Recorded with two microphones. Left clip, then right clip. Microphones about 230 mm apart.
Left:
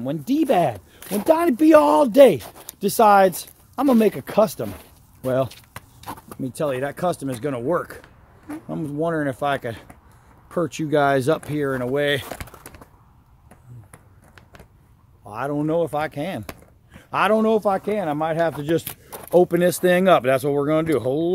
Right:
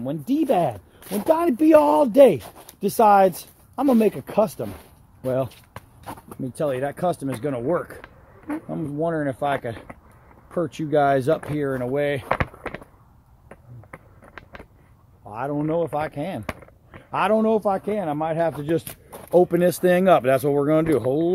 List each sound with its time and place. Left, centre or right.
0.0 s speech: centre
2.4 s speech: centre
2.8 s speech: centre
5.2 s a sound: centre
6.4 s speech: centre
15.2 s speech: centre
18.9 s a sound: centre
19.3 s speech: centre
20.2 s speech: right